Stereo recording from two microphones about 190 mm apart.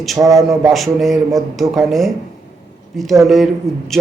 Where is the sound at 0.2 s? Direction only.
20° right (ahead or behind).